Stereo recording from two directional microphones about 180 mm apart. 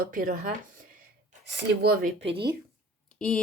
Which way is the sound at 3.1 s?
5° left (ahead or behind).